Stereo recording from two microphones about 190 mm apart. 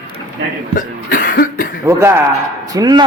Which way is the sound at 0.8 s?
45° left (ahead or behind).